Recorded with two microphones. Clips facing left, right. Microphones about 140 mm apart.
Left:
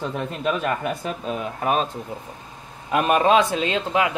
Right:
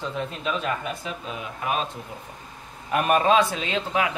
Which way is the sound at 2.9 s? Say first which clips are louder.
Left 2 dB; 25° left (ahead or behind).